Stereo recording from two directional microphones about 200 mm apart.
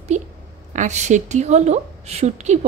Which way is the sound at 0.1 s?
35° right (ahead or behind).